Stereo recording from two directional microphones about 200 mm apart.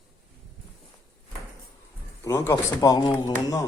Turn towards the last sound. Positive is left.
turn(degrees=15)  # may be behind; listen again after turning